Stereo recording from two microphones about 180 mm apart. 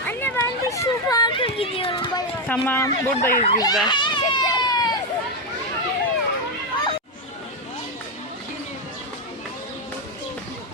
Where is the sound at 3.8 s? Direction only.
25° left (ahead or behind).